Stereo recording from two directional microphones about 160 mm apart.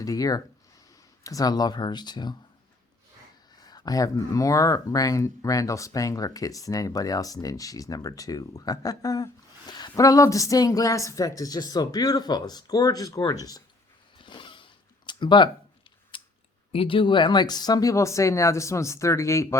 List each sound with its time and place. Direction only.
0.0 s speech: 20° left (ahead or behind)
3.5 s speech: 25° left (ahead or behind)
14.2 s zipper: 30° left (ahead or behind)
16.1 s a sound: 35° left (ahead or behind)
16.7 s speech: 35° left (ahead or behind)